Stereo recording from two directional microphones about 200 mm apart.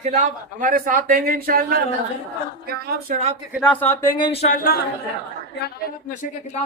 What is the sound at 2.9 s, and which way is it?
Speech, 45° right (ahead or behind).